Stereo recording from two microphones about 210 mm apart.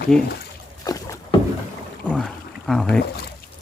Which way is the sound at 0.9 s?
15° left (ahead or behind).